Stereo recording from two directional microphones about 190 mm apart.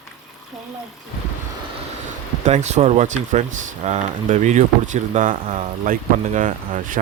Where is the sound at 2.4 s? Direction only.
35° right (ahead or behind).